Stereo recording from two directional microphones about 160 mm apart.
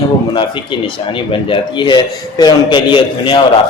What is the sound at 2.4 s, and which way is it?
A man's voice, 30° left (ahead or behind).